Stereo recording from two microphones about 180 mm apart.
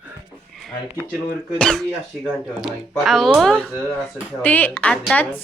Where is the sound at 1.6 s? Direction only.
5° left (ahead or behind).